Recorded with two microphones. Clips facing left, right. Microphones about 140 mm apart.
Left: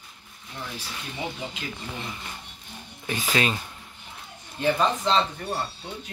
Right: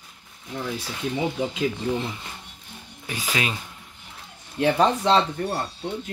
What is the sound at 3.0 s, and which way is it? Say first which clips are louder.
Speech: left 2 dB; 10° right (ahead or behind).